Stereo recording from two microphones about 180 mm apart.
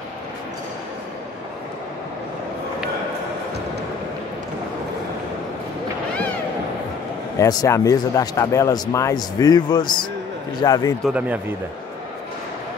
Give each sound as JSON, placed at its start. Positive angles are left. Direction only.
{"t": 7.3, "sound": "a man's voice", "side_deg": 20}
{"t": 11.1, "sound": "speech", "side_deg": -10}